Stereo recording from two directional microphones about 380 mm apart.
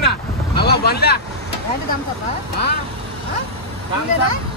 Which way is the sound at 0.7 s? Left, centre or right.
Left.